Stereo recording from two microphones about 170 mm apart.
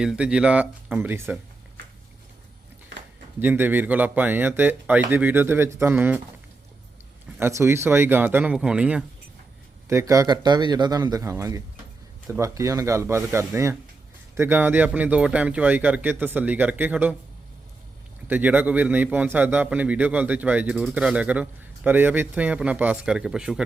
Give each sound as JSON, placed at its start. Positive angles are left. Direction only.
{"t": 0.0, "sound": "a man's voice", "side_deg": -5}
{"t": 3.4, "sound": "a man's voice", "side_deg": -10}
{"t": 7.3, "sound": "a man's voice", "side_deg": -15}
{"t": 9.9, "sound": "a man's voice", "side_deg": -20}
{"t": 18.3, "sound": "a man's voice", "side_deg": -10}